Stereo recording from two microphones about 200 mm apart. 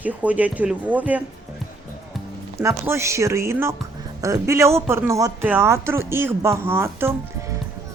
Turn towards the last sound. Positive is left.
turn(degrees=-10)  # may be behind; listen again after turning